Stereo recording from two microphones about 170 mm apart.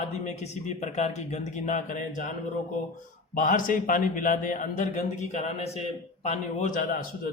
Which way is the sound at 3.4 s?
50° left (ahead or behind).